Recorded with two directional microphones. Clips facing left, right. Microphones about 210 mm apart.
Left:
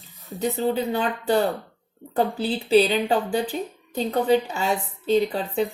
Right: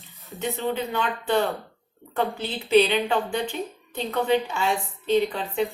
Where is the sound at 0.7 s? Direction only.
35° left (ahead or behind).